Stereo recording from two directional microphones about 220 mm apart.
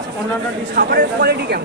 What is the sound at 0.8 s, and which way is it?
Speech, 50° right (ahead or behind).